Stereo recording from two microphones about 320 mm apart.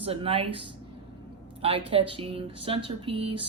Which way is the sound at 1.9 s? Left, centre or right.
Centre.